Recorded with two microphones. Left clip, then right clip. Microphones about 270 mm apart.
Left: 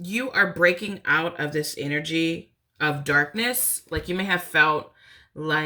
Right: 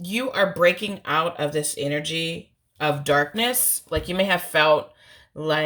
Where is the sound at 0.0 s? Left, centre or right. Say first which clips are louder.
Even; centre.